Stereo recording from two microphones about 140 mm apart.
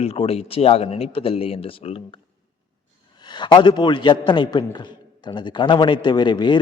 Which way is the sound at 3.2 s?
30° left (ahead or behind).